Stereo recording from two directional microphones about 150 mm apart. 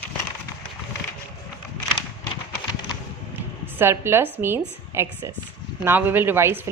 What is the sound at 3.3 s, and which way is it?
A woman's voice, 15° right (ahead or behind).